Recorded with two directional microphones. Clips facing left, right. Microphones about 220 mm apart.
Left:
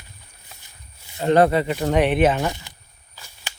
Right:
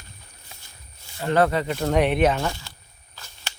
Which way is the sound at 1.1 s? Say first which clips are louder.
Left 4 dB; 20° left (ahead or behind).